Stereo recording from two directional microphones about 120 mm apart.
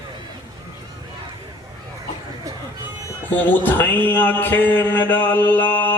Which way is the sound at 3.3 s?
15° left (ahead or behind).